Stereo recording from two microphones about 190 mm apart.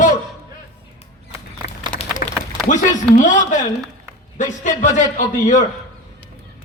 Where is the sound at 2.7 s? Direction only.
40° left (ahead or behind).